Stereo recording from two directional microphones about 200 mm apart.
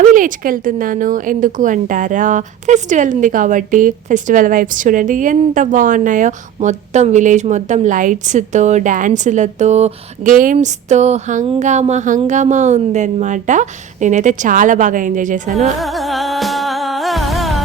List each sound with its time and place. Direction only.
0.0 s speech: 40° right (ahead or behind)
15.8 s music: centre (ahead or behind)